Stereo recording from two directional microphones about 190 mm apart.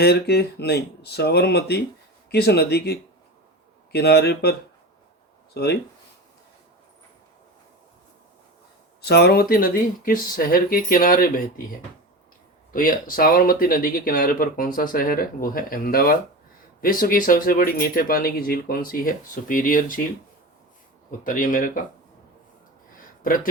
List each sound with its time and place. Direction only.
0.0 s speech: 60° left (ahead or behind)
5.5 s speech: 55° left (ahead or behind)
9.0 s speech: 60° left (ahead or behind)
12.7 s speech: 45° left (ahead or behind)
21.2 s speech: 45° left (ahead or behind)
23.2 s speech: 45° left (ahead or behind)